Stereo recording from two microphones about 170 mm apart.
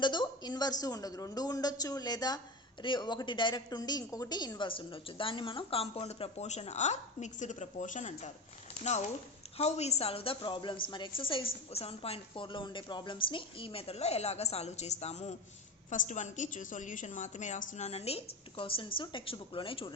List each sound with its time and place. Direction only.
0.0 s a woman's voice: 25° left (ahead or behind)